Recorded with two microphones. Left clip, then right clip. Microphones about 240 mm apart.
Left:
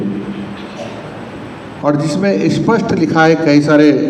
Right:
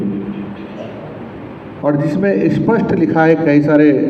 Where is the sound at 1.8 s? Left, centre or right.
Left.